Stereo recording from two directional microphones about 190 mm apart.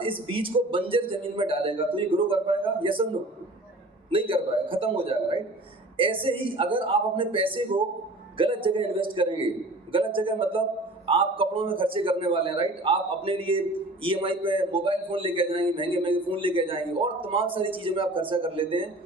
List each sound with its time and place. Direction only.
0.0 s a man's voice: 25° right (ahead or behind)
4.1 s a man's voice: 25° right (ahead or behind)